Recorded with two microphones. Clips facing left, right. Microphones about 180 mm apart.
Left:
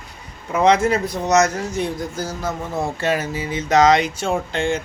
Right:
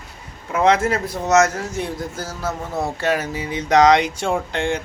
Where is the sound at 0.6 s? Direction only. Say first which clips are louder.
Left 1 dB; 5° right (ahead or behind).